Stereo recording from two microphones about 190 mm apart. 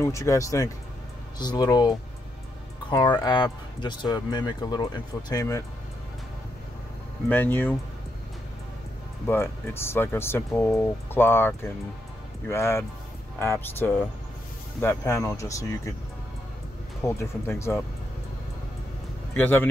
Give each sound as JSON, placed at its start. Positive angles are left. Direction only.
{"t": 0.0, "sound": "speech", "side_deg": 15}
{"t": 7.2, "sound": "speech", "side_deg": 10}
{"t": 9.3, "sound": "speech", "side_deg": 10}
{"t": 17.0, "sound": "speech", "side_deg": 15}
{"t": 19.3, "sound": "speech", "side_deg": 10}